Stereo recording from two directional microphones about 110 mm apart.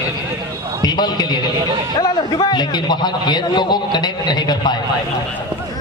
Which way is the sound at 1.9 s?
40° left (ahead or behind).